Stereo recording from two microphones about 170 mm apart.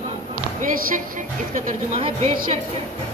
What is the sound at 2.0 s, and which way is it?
Speech, 35° right (ahead or behind).